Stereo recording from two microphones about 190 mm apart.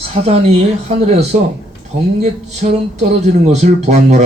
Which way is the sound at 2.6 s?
50° right (ahead or behind).